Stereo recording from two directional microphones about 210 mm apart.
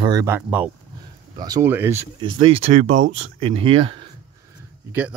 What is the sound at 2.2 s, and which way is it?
Speech, 25° right (ahead or behind).